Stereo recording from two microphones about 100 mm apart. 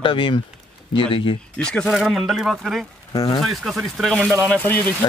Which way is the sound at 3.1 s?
40° left (ahead or behind).